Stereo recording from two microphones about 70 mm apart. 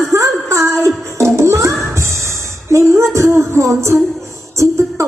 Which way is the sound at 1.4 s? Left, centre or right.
Right.